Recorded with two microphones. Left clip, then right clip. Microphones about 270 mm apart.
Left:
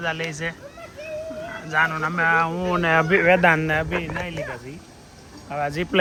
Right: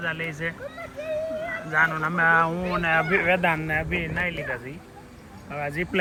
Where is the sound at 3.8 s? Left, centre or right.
Centre.